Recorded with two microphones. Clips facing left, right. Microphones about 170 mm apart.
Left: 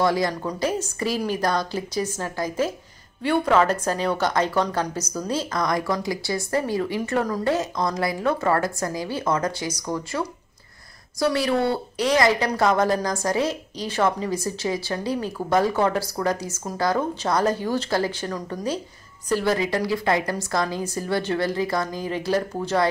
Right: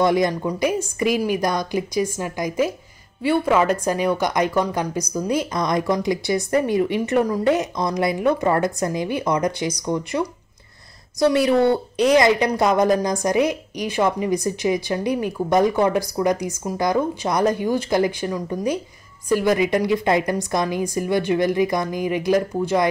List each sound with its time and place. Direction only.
0.0 s a woman's voice: 20° right (ahead or behind)